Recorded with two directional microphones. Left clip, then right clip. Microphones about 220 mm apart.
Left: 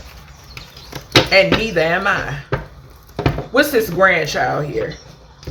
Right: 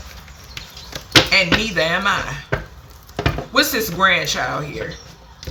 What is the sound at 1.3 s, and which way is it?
Speech, 5° right (ahead or behind).